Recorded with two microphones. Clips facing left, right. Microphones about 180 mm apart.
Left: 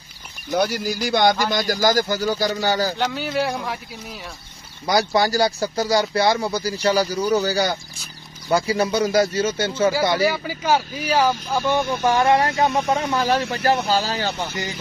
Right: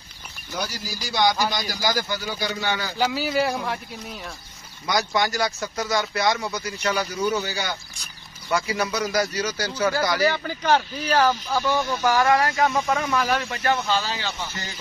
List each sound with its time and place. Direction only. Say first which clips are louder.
0.5 s speech: left 10 dB; 60° left (ahead or behind); by 3.0 s 40° left (ahead or behind)
3.0 s speech: even; 5° right (ahead or behind)
4.8 s speech: left 5 dB; 35° left (ahead or behind)
10.2 s speech: left 1 dB; 5° left (ahead or behind)
13.1 s speech: left 3 dB; 30° left (ahead or behind)
14.5 s speech: left 7 dB; 15° left (ahead or behind)